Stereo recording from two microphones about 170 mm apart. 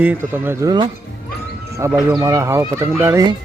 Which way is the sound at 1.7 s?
15° right (ahead or behind).